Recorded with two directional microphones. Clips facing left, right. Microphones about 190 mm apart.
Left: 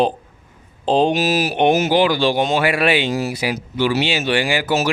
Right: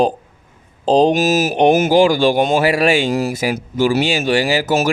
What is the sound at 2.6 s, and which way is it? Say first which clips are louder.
Speech: right 3 dB; 40° right (ahead or behind).